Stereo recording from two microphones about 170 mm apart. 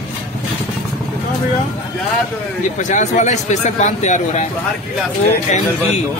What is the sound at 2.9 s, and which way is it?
A man's voice, 45° left (ahead or behind).